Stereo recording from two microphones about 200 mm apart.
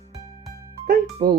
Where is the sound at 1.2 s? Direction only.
45° right (ahead or behind).